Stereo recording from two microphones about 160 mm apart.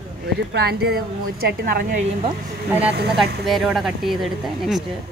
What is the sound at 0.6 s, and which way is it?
A woman's voice, 75° right (ahead or behind).